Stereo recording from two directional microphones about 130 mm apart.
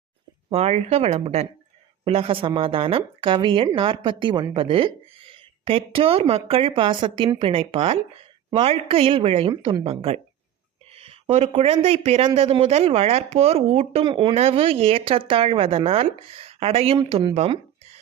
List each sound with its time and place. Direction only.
0.5 s speech: 50° right (ahead or behind)
14.1 s speech: 40° right (ahead or behind)
17.3 s a sound: 50° right (ahead or behind)